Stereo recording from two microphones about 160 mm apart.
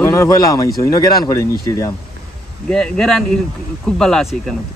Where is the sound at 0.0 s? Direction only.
15° left (ahead or behind).